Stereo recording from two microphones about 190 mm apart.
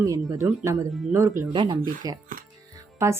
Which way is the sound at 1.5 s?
25° right (ahead or behind).